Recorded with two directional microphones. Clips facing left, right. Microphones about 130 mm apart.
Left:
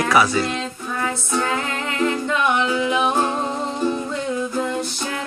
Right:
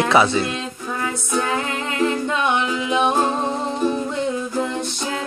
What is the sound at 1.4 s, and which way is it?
A capella, 15° right (ahead or behind).